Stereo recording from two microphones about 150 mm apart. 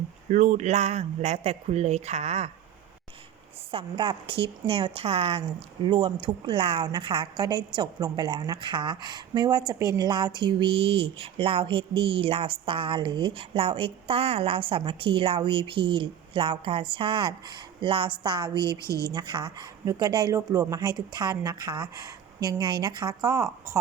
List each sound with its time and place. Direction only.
0.3 s speech: 55° right (ahead or behind)
3.7 s a woman's voice: 35° right (ahead or behind)
18.9 s a woman's voice: 20° left (ahead or behind)
19.1 s speech: 30° right (ahead or behind)